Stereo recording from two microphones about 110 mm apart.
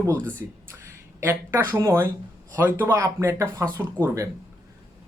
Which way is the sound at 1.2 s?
20° right (ahead or behind).